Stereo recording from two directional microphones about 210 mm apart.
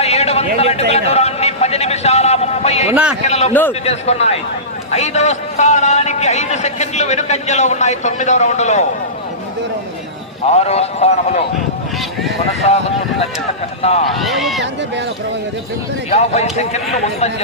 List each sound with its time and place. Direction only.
0.0 s a sound: 30° left (ahead or behind)
2.9 s speech: 5° right (ahead or behind)
3.2 s a man's voice: 30° left (ahead or behind)
10.5 s a man's voice: 30° left (ahead or behind)
12.6 s a man's voice: 30° left (ahead or behind)
14.2 s speech: centre (ahead or behind)
16.0 s a man's voice: 30° left (ahead or behind)